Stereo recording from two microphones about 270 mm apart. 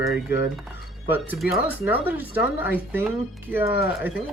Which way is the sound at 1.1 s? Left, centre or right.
Centre.